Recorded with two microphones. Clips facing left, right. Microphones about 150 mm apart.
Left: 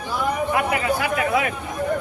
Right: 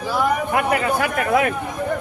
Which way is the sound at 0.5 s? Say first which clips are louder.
Right 2 dB; 50° right (ahead or behind).